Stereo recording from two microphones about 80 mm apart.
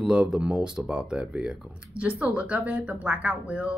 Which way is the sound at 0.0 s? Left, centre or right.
Centre.